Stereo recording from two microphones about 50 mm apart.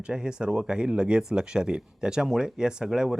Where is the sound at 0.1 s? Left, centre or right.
Centre.